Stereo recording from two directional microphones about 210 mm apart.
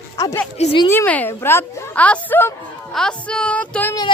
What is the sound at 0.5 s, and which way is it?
Speech, 30° left (ahead or behind).